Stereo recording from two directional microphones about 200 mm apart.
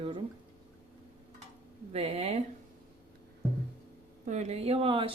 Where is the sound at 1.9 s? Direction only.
30° right (ahead or behind).